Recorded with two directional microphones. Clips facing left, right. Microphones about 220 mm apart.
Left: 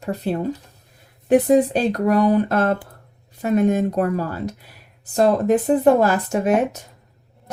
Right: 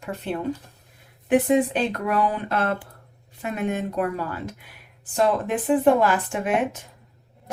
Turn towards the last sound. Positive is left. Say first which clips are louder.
# left 5 dB
turn(degrees=40)  # may be behind; listen again after turning